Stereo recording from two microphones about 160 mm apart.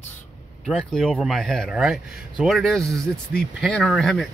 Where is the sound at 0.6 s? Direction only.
Centre (ahead or behind).